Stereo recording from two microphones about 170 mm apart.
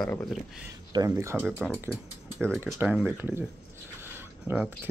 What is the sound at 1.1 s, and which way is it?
Speech, 15° right (ahead or behind).